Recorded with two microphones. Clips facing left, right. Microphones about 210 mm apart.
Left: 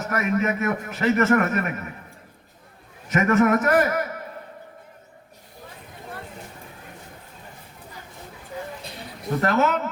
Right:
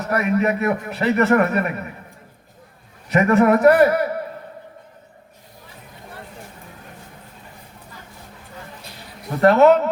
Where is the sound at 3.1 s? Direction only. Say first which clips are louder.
Right 4 dB; 35° right (ahead or behind).